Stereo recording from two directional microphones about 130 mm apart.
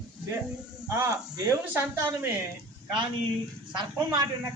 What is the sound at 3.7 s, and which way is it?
Speech, 35° right (ahead or behind).